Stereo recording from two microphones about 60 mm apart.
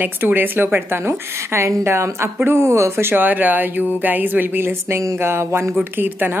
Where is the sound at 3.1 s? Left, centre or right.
Right.